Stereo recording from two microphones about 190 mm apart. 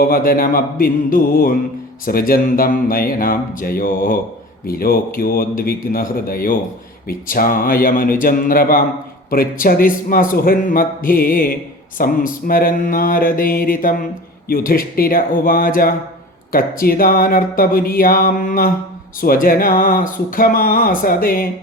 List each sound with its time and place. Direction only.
0.0 s mantra: 50° left (ahead or behind)